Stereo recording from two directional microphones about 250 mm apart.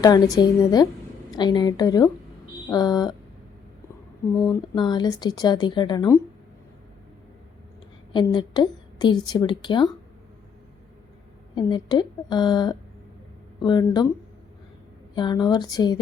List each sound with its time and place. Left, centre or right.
0.0 s a woman's voice: centre
4.4 s a woman's voice: centre
8.1 s a woman's voice: centre
11.5 s a woman's voice: centre
15.1 s a woman's voice: centre